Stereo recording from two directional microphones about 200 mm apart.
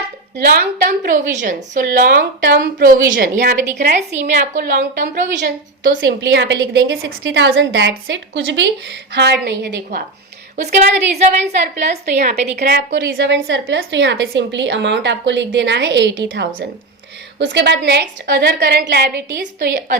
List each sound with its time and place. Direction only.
0.3 s a woman's voice: 50° right (ahead or behind)
3.8 s a woman's voice: 35° right (ahead or behind)
5.3 s a woman's voice: 65° right (ahead or behind)
11.1 s a woman's voice: 35° right (ahead or behind)
12.5 s a woman's voice: 50° right (ahead or behind)
19.5 s a woman's voice: 45° right (ahead or behind)